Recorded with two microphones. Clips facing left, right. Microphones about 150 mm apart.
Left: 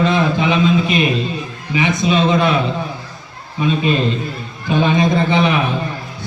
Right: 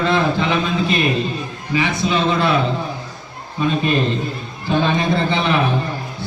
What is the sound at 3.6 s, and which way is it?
A man's voice, 15° left (ahead or behind).